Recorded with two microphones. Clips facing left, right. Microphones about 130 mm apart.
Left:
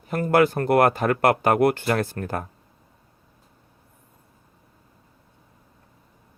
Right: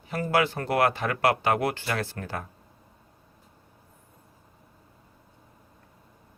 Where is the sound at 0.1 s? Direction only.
50° left (ahead or behind).